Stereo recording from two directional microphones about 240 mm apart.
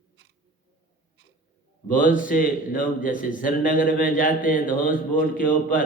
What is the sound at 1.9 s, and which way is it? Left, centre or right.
A man's voice, left.